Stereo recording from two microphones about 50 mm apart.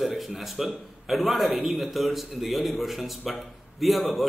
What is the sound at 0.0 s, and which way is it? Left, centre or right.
Speech, centre.